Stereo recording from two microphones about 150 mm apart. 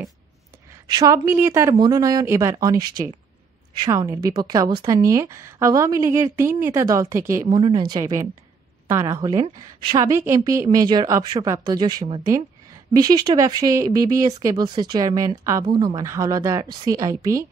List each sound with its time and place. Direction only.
0.8 s a woman's voice: 25° right (ahead or behind)